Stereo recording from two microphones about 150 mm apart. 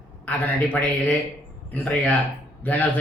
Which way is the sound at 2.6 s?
10° left (ahead or behind).